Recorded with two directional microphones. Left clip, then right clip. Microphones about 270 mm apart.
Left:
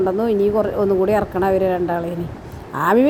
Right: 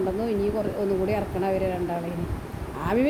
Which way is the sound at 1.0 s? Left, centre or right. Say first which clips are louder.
Left 8 dB; left.